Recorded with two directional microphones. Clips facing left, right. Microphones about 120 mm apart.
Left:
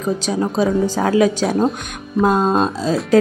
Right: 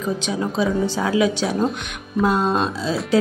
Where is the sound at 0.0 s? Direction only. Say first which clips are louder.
Left 4 dB; 40° left (ahead or behind).